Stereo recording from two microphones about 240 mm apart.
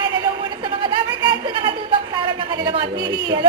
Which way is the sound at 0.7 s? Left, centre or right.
Centre.